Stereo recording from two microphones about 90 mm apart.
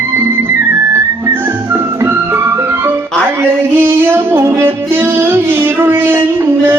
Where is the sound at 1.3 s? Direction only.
25° right (ahead or behind).